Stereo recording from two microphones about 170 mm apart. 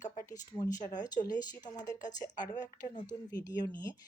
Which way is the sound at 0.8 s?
45° left (ahead or behind).